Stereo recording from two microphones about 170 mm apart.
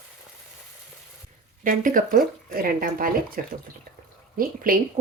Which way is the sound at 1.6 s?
55° right (ahead or behind).